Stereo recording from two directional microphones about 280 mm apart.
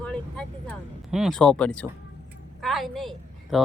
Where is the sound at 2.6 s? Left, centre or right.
Centre.